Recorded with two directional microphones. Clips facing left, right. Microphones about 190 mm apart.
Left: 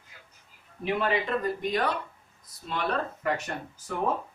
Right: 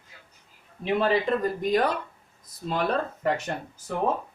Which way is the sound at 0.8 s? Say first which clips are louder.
Right 4 dB; 30° right (ahead or behind).